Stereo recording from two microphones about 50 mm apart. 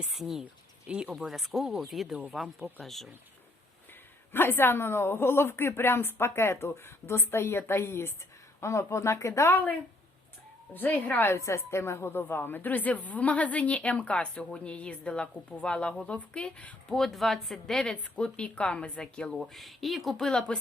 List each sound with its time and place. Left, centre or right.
0.1 s speech: centre
0.9 s speech: right
1.3 s speech: centre
2.6 s speech: right
2.8 s speech: centre
4.3 s speech: left
8.6 s speech: left
9.5 s speech: left
10.8 s speech: left
11.3 s a woman's voice: left
16.9 s speech: centre
17.9 s a woman's voice: left
19.4 s speech: centre